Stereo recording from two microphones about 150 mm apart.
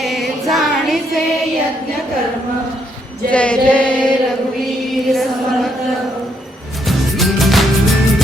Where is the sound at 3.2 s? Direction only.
10° left (ahead or behind).